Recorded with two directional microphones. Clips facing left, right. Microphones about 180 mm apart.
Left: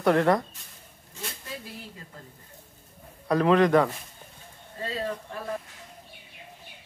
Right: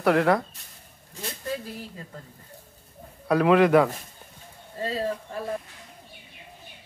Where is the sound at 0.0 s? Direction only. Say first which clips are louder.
Right 1 dB; centre (ahead or behind).